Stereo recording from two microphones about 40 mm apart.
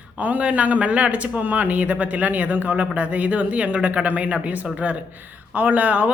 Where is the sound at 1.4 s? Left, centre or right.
Right.